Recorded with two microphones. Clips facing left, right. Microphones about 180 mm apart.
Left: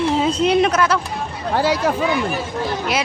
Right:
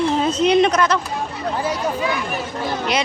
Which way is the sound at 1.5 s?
85° left.